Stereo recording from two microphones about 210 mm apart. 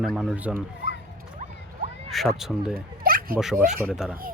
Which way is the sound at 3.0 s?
45° right (ahead or behind).